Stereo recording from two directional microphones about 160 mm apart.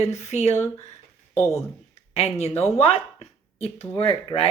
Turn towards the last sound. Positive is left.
turn(degrees=35)  # may be behind; listen again after turning